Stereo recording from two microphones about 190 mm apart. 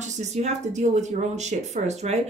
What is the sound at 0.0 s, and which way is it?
Speech, 35° right (ahead or behind).